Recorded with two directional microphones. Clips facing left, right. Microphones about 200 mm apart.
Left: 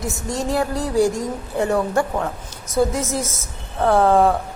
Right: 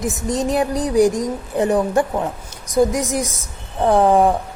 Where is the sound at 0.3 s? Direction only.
20° right (ahead or behind).